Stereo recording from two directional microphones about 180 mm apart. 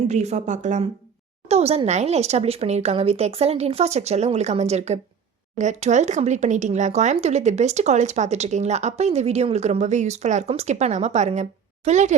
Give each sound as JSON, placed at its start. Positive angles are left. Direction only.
{"t": 0.1, "sound": "speech", "side_deg": -40}